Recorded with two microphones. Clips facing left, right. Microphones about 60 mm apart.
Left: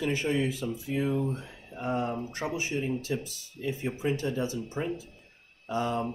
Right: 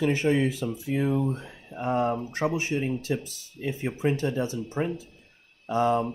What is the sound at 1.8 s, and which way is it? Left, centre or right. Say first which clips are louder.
Speech: right 5 dB; right.